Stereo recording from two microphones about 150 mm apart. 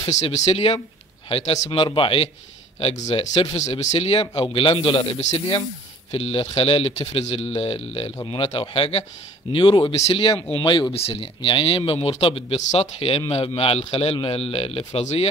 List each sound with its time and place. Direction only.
0.0 s speech: 45° left (ahead or behind)
2.8 s speech: 45° left (ahead or behind)
6.1 s speech: 40° left (ahead or behind)
9.9 s speech: 45° left (ahead or behind)
10.2 s speech: 30° left (ahead or behind)